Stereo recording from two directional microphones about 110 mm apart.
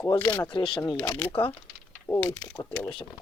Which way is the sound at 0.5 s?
50° left (ahead or behind).